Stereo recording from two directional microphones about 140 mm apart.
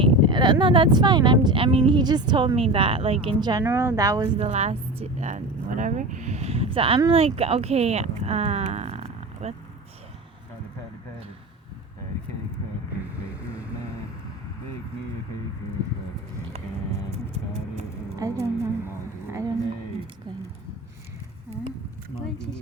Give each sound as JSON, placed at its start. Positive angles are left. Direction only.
{"t": 0.0, "sound": "speech", "side_deg": -35}
{"t": 3.6, "sound": "speech", "side_deg": -20}
{"t": 4.4, "sound": "speech", "side_deg": -50}
{"t": 18.2, "sound": "a woman's voice", "side_deg": -20}
{"t": 19.3, "sound": "a sound", "side_deg": -25}